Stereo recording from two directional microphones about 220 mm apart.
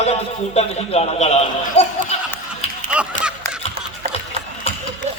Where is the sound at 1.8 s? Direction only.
25° left (ahead or behind).